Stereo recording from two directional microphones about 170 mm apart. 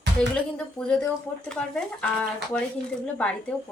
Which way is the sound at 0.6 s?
5° left (ahead or behind).